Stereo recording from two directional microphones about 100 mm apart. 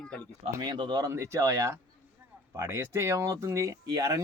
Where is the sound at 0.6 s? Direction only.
45° right (ahead or behind).